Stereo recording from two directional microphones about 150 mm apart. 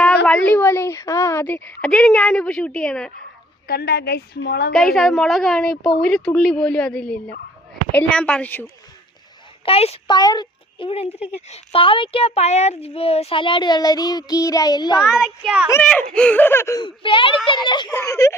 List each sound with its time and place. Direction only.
0.3 s a woman's voice: 10° left (ahead or behind)
3.7 s a woman's voice: 90° left
4.9 s a woman's voice: 5° left (ahead or behind)
9.6 s a woman's voice: 40° left (ahead or behind)
10.1 s a child's voice: 30° left (ahead or behind)
14.9 s a woman's voice: centre (ahead or behind)
15.8 s a woman's voice: 5° left (ahead or behind)
16.8 s speech: 35° left (ahead or behind)